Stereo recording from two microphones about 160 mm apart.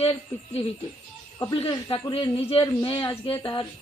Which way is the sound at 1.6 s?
30° left (ahead or behind).